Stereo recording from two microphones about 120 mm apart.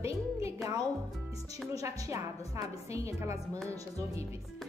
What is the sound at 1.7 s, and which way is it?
A woman's voice, 30° right (ahead or behind).